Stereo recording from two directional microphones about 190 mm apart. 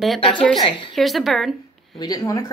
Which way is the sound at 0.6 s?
25° left (ahead or behind).